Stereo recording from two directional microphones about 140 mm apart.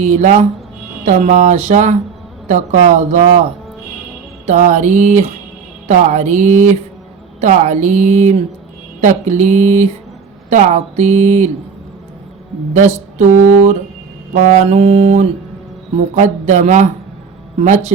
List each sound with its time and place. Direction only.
0.0 s speech: 55° right (ahead or behind)
13.1 s speech: 55° right (ahead or behind)